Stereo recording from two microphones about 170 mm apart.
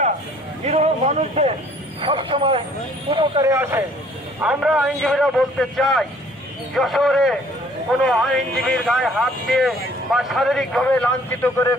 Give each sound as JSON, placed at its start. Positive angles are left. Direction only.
{"t": 0.6, "sound": "a man's voice", "side_deg": -40}